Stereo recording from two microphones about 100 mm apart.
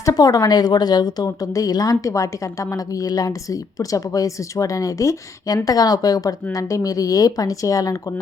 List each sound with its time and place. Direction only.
0.0 s a woman's voice: 35° left (ahead or behind)